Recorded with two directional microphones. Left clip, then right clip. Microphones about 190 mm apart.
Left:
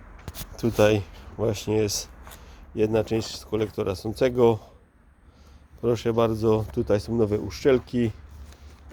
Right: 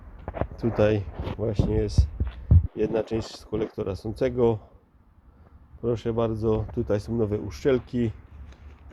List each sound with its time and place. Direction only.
0.5 s speech: 5° left (ahead or behind)
5.8 s speech: 10° left (ahead or behind)